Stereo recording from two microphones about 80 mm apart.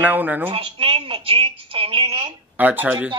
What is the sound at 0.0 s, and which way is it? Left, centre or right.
Speech, right.